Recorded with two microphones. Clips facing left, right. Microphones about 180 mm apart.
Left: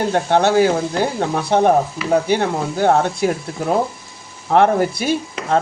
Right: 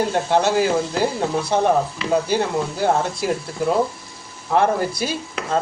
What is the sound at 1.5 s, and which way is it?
Speech, 65° left (ahead or behind).